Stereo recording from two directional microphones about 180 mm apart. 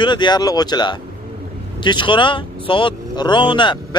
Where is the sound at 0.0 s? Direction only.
25° left (ahead or behind).